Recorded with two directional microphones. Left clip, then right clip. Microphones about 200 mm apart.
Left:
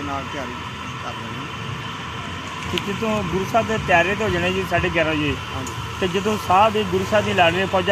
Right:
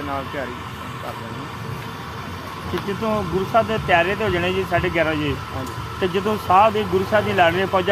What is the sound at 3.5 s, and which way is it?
Speech, 25° left (ahead or behind).